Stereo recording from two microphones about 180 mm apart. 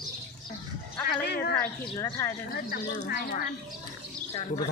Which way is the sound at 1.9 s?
20° left (ahead or behind).